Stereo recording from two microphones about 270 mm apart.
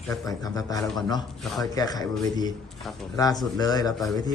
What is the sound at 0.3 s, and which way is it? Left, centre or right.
Speech, centre.